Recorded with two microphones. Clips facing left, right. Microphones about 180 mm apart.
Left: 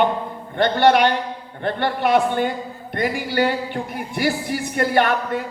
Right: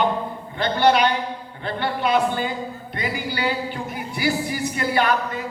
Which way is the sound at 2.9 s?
55° left (ahead or behind).